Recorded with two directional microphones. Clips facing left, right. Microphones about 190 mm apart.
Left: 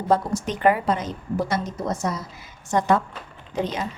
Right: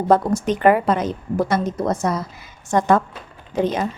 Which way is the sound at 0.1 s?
55° right (ahead or behind).